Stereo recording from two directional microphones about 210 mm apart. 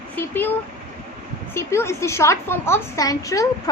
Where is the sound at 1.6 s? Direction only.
10° left (ahead or behind).